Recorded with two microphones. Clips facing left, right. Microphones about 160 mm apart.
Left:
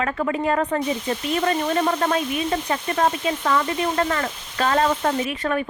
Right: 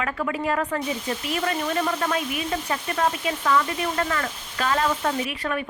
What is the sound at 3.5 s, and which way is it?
Speech, 35° left (ahead or behind).